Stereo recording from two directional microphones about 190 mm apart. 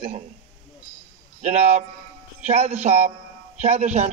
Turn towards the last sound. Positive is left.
turn(degrees=-35)  # may be behind; listen again after turning